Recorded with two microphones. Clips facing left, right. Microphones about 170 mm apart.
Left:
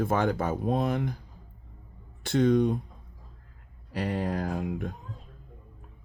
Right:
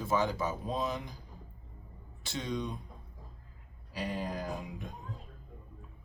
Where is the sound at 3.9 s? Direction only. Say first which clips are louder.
Left 7 dB; 65° left (ahead or behind).